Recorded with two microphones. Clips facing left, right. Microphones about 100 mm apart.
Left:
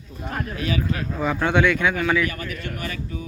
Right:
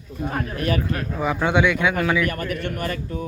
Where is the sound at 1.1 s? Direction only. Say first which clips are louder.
Right 1 dB; 10° right (ahead or behind).